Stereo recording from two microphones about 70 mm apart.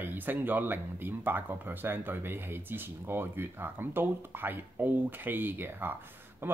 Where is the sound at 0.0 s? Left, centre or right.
Right.